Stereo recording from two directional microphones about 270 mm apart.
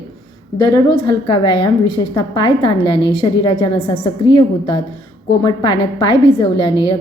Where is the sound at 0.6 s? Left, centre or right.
Centre.